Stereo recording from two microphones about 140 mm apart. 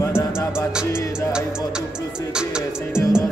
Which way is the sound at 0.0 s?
20° left (ahead or behind).